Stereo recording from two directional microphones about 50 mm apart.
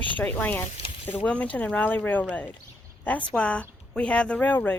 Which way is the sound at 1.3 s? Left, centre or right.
Left.